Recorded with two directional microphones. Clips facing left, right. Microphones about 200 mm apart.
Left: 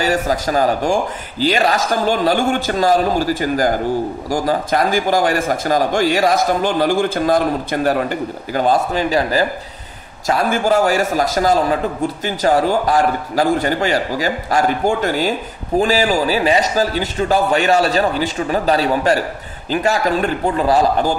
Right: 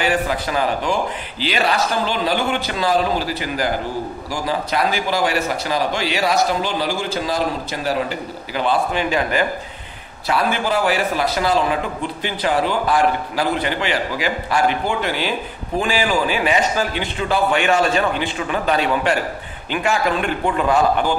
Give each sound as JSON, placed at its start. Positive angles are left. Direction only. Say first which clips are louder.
{"t": 0.0, "sound": "a man's voice", "louder": "left 3 dB", "side_deg": 40}